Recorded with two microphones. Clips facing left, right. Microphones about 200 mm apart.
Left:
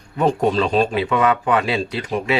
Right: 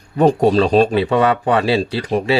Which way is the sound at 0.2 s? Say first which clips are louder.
Right 5 dB; 35° right (ahead or behind).